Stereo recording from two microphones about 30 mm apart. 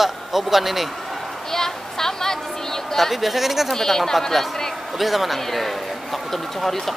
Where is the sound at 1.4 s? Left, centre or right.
Centre.